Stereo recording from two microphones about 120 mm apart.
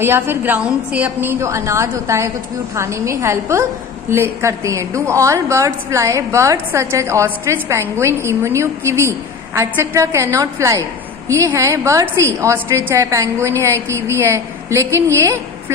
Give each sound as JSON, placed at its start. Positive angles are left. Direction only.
{"t": 0.0, "sound": "a woman's voice", "side_deg": -20}